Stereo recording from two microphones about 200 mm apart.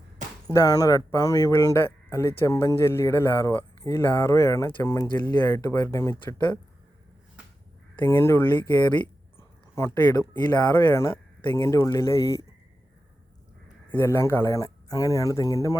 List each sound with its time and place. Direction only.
0.4 s speech: 20° left (ahead or behind)
7.9 s speech: 10° left (ahead or behind)
9.0 s a sound: 10° left (ahead or behind)
10.6 s speech: 10° left (ahead or behind)
13.9 s speech: 10° left (ahead or behind)